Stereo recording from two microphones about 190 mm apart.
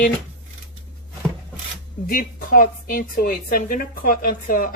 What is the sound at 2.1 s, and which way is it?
Speech, 50° left (ahead or behind).